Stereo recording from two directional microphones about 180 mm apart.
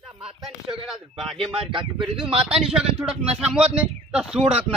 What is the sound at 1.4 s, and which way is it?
Speech, 30° right (ahead or behind).